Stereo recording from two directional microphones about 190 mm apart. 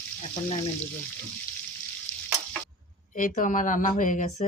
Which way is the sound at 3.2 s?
40° left (ahead or behind).